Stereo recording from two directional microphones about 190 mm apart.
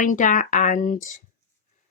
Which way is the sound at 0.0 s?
40° left (ahead or behind).